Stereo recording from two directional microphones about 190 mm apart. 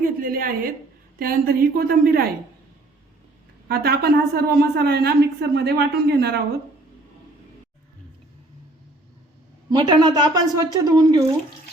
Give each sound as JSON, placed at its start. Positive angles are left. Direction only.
{"t": 0.0, "sound": "a woman's voice", "side_deg": -50}
{"t": 3.7, "sound": "a woman's voice", "side_deg": -55}
{"t": 9.6, "sound": "a woman's voice", "side_deg": -25}